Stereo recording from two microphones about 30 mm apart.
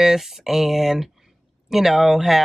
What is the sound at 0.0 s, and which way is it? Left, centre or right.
Speech, centre.